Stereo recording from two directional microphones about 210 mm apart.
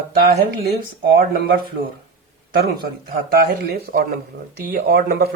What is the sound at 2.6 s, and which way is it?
Speech, 45° right (ahead or behind).